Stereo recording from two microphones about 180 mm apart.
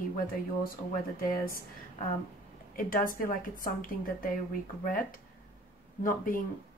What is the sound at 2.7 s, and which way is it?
Speech, 50° left (ahead or behind).